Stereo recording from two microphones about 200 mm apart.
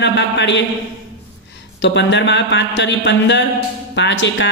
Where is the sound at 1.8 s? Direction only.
60° left (ahead or behind).